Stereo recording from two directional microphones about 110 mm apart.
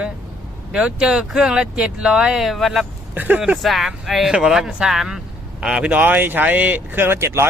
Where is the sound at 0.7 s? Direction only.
10° right (ahead or behind).